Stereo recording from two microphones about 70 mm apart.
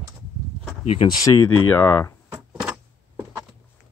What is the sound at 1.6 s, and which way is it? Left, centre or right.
Speech, left.